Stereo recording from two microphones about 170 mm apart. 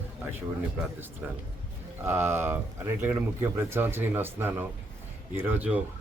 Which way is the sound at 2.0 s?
15° right (ahead or behind).